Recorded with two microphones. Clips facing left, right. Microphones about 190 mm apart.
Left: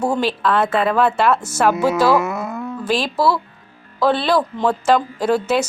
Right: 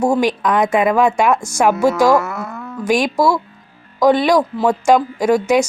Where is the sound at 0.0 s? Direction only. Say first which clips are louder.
Right 3 dB; 10° right (ahead or behind).